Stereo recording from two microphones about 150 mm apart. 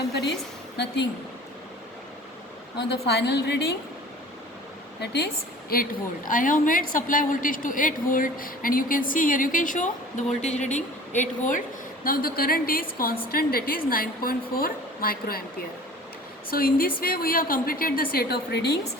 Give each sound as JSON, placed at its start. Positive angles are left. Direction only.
{"t": 3.1, "sound": "a woman's voice", "side_deg": 90}
{"t": 4.9, "sound": "a woman's voice", "side_deg": 90}
{"t": 5.7, "sound": "a woman's voice", "side_deg": 65}
{"t": 12.0, "sound": "a woman's voice", "side_deg": 75}
{"t": 16.5, "sound": "a woman's voice", "side_deg": 75}